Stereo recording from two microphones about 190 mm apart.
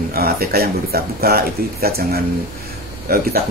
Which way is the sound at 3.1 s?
55° right (ahead or behind).